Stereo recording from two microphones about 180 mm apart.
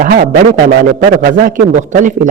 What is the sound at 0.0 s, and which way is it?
A man's voice, 50° right (ahead or behind).